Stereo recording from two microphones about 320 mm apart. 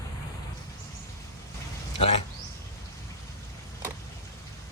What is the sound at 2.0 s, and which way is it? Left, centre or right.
Speech, centre.